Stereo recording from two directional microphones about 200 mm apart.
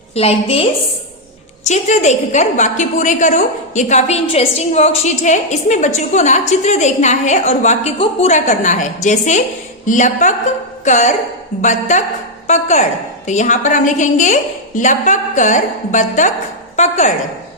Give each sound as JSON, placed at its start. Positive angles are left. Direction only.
{"t": 0.1, "sound": "a woman's voice", "side_deg": 30}